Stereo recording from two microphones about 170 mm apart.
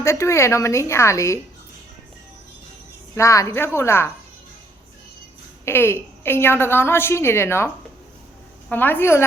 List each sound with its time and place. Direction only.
0.0 s a woman's voice: 15° left (ahead or behind)
3.2 s a woman's voice: 15° left (ahead or behind)
5.6 s a woman's voice: 15° left (ahead or behind)
8.7 s a woman's voice: 10° left (ahead or behind)